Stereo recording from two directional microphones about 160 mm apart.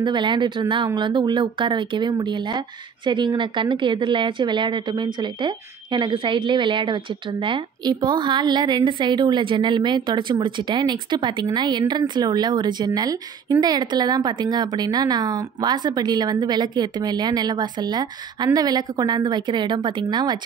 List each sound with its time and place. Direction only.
0.0 s speech: 30° right (ahead or behind)